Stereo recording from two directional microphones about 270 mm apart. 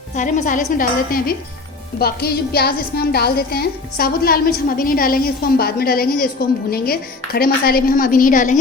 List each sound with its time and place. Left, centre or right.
0.2 s a woman's voice: left